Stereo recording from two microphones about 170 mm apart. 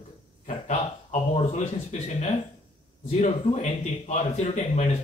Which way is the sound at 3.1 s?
40° left (ahead or behind).